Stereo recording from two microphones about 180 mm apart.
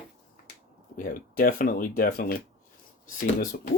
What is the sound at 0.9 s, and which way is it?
Speech, 50° left (ahead or behind).